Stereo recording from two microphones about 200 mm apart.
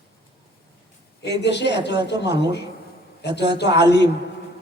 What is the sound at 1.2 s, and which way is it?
A man's voice, 60° left (ahead or behind).